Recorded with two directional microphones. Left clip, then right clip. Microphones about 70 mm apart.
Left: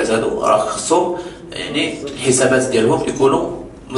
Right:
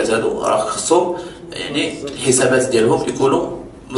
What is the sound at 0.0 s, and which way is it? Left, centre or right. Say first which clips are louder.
A man's voice: left 1 dB; right.